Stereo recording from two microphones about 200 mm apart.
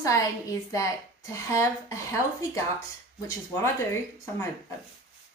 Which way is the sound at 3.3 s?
15° left (ahead or behind).